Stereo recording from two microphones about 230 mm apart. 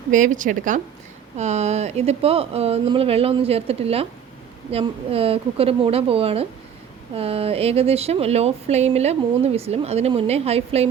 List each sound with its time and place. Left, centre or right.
0.1 s a woman's voice: right